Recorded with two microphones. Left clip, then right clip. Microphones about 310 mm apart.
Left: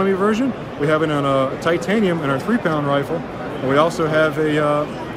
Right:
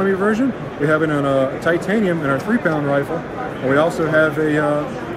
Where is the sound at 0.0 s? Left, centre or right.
Centre.